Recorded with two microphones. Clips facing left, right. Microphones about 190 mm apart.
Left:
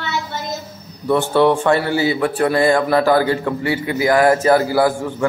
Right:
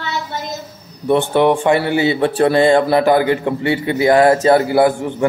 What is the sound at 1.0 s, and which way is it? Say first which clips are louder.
A man's voice: right 1 dB; 20° right (ahead or behind).